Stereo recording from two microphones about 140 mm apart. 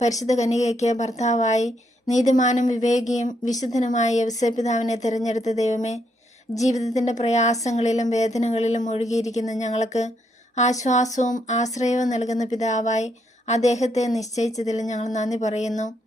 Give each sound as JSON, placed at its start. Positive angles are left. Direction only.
{"t": 0.3, "sound": "a woman's voice", "side_deg": 55}